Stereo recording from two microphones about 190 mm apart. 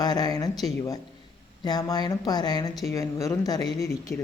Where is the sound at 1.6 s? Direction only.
20° left (ahead or behind).